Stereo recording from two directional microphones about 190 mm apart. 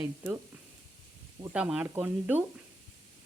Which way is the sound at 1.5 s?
5° right (ahead or behind).